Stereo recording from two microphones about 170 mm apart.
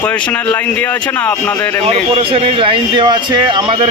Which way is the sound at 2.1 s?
35° right (ahead or behind).